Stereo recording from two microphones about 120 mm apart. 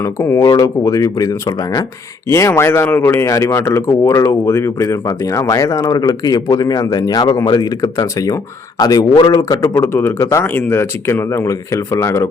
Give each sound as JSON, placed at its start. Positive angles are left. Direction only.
{"t": 0.0, "sound": "a man's voice", "side_deg": 25}
{"t": 9.6, "sound": "speech", "side_deg": 20}